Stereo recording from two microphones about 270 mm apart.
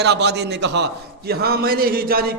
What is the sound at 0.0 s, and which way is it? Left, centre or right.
A man's voice, right.